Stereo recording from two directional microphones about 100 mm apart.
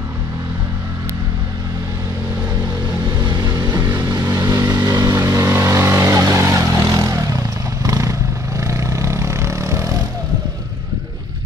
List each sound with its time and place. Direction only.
3.2 s vehicle: 45° right (ahead or behind)